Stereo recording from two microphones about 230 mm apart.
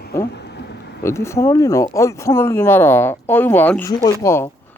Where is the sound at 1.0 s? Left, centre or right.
Centre.